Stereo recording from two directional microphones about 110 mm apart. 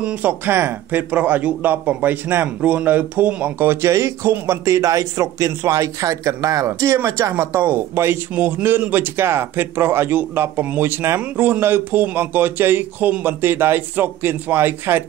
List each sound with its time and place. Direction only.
0.0 s a man's voice: 15° right (ahead or behind)